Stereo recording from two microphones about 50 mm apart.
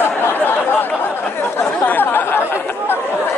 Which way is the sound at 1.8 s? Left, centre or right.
Left.